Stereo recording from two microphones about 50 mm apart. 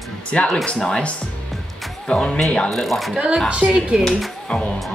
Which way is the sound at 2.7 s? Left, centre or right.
Centre.